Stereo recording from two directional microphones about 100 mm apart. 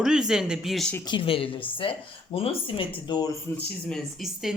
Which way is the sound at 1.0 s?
55° left (ahead or behind).